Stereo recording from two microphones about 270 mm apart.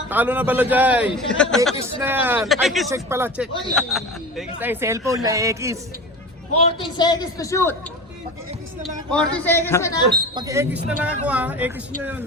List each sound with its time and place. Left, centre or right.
0.1 s speech: centre
6.6 s a man's voice: centre
8.8 s a man's voice: centre
10.3 s speech: centre